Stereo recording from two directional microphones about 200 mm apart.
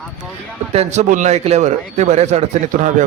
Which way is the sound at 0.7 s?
35° right (ahead or behind).